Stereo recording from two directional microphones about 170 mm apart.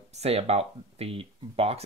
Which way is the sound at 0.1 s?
40° right (ahead or behind).